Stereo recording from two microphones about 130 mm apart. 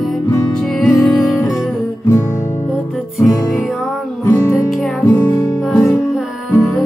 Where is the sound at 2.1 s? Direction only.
20° left (ahead or behind).